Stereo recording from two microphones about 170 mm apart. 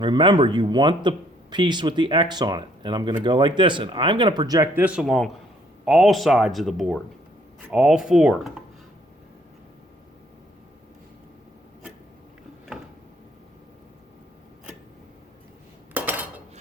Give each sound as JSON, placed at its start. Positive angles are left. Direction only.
{"t": 0.0, "sound": "speech", "side_deg": -30}
{"t": 4.8, "sound": "speech", "side_deg": -5}
{"t": 16.0, "sound": "cutlery", "side_deg": -10}